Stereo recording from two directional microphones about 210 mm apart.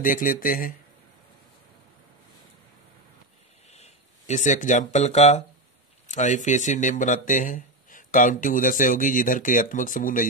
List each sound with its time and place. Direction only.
0.0 s speech: 40° left (ahead or behind)
3.7 s speech: 35° left (ahead or behind)